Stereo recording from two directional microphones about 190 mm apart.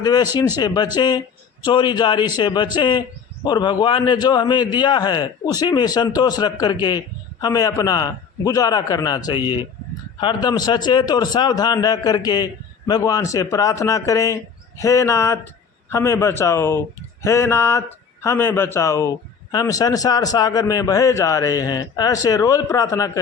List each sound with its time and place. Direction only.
0.0 s a man's voice: 20° left (ahead or behind)